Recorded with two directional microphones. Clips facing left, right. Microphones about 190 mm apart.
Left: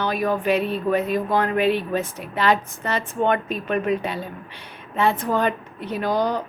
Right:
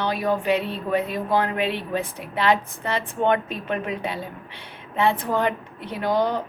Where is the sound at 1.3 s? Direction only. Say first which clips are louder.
Left 2 dB; 25° right (ahead or behind).